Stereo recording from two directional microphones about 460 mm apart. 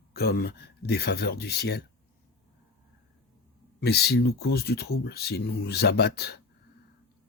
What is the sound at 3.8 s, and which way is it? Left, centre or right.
Speech, left.